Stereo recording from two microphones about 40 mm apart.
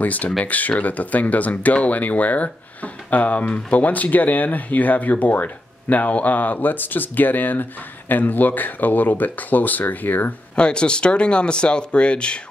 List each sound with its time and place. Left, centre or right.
0.0 s speech: left
10.5 s speech: left